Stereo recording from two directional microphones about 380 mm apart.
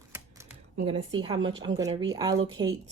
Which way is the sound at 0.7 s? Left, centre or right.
Centre.